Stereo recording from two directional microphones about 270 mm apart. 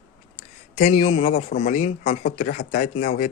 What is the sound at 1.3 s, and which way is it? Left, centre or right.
Speech, left.